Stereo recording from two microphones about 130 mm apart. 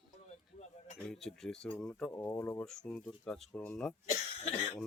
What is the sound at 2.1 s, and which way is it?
Speech, 20° left (ahead or behind).